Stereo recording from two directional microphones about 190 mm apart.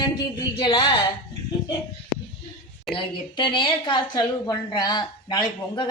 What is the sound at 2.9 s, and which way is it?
A woman's voice, 25° left (ahead or behind).